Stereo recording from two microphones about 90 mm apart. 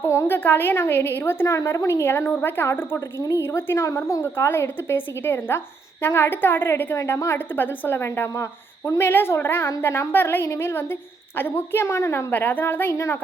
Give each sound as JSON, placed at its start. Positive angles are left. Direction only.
{"t": 0.0, "sound": "a woman's voice", "side_deg": 30}